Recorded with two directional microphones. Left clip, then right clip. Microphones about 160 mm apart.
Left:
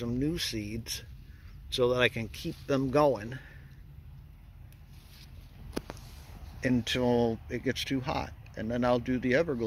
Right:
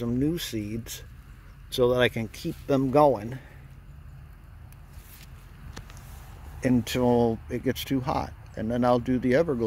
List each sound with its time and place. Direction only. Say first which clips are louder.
0.0 s speech: right 4 dB; 20° right (ahead or behind)
6.6 s speech: right 4 dB; 25° right (ahead or behind)